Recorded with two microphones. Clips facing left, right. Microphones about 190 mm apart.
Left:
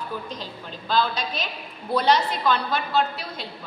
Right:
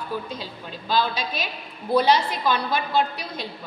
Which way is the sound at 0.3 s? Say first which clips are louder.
Right 1 dB; 10° right (ahead or behind).